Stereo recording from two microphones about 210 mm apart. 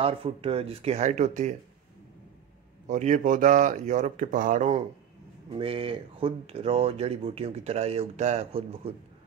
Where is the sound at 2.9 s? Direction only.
35° right (ahead or behind).